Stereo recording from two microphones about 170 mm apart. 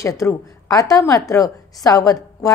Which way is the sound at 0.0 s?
20° left (ahead or behind).